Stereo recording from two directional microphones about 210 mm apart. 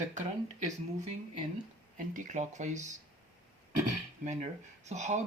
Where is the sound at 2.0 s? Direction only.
35° right (ahead or behind).